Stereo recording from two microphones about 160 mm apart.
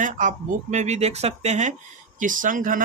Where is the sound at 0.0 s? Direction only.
50° right (ahead or behind).